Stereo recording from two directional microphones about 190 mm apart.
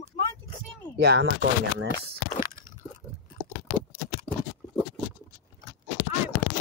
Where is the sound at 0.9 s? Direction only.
60° right (ahead or behind).